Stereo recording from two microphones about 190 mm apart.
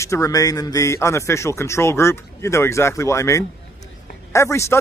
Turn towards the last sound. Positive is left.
turn(degrees=15)  # may be behind; listen again after turning